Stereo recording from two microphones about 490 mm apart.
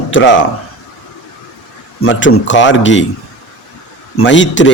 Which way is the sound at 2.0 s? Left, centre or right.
Left.